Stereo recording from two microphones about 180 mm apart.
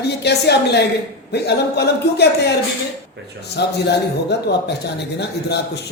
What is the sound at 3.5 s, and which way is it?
Speech, 65° left (ahead or behind).